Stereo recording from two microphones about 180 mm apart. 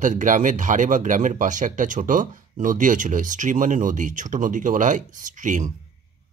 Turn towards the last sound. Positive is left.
turn(degrees=-45)  # may be behind; listen again after turning